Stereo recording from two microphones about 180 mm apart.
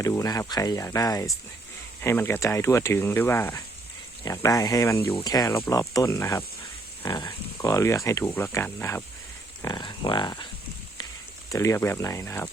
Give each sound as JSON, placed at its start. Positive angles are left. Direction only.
{"t": 0.0, "sound": "speech", "side_deg": 20}
{"t": 9.6, "sound": "speech", "side_deg": 20}
{"t": 11.5, "sound": "speech", "side_deg": 15}